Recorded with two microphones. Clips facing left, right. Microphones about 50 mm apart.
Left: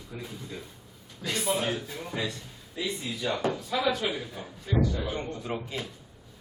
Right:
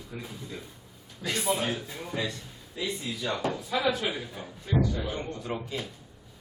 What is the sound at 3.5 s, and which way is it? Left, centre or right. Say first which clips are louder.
Speech: right 1 dB; centre.